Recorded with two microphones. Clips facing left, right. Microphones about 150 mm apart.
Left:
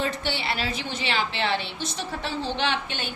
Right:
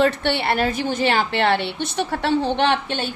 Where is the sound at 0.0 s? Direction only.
65° right (ahead or behind).